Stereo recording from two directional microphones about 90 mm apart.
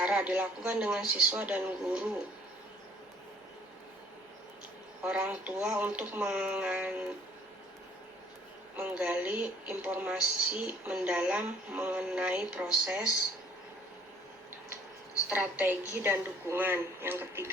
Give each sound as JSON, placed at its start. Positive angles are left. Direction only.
{"t": 0.0, "sound": "speech", "side_deg": -15}
{"t": 5.0, "sound": "speech", "side_deg": -15}
{"t": 8.7, "sound": "speech", "side_deg": -15}
{"t": 15.3, "sound": "speech", "side_deg": -15}